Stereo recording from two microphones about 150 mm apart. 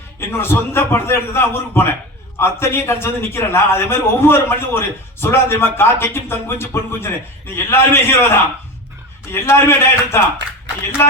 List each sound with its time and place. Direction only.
0.2 s speech: 15° left (ahead or behind)